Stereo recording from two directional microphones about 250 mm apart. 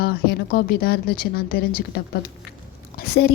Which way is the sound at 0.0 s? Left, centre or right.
Left.